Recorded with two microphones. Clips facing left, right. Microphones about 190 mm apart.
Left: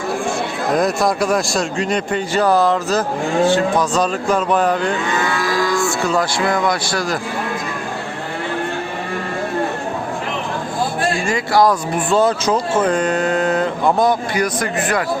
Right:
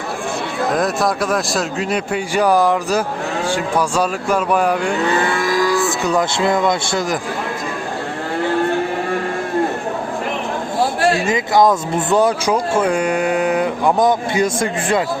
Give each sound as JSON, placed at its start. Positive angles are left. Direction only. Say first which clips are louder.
{"t": 0.8, "sound": "speech", "louder": "left 3 dB", "side_deg": 0}
{"t": 5.0, "sound": "cattle", "louder": "right 3 dB", "side_deg": -30}
{"t": 5.5, "sound": "speech", "louder": "right 1 dB", "side_deg": -15}
{"t": 11.3, "sound": "speech", "louder": "left 2 dB", "side_deg": -20}